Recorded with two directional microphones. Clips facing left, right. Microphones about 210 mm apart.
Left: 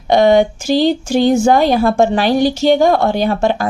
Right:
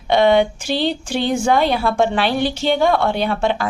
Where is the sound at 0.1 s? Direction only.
40° left (ahead or behind).